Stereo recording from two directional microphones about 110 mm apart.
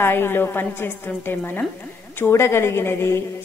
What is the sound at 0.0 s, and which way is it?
A woman's voice, 20° left (ahead or behind).